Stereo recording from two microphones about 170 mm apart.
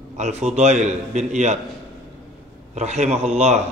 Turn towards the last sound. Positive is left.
turn(degrees=-40)  # may be behind; listen again after turning